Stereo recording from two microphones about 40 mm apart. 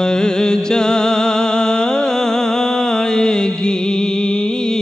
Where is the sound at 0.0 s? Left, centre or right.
Centre.